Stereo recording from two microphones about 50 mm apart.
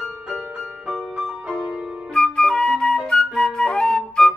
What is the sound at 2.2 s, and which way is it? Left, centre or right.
Flute, centre.